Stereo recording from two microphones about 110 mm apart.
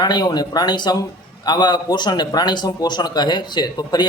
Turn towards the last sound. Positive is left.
turn(degrees=40)  # may be behind; listen again after turning